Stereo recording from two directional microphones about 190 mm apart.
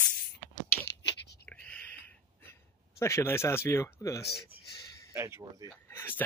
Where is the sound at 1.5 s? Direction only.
5° left (ahead or behind).